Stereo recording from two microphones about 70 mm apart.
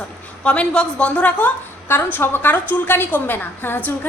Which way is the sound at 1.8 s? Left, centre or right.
Left.